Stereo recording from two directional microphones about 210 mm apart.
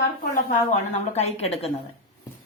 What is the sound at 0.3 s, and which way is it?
A woman's voice, 30° left (ahead or behind).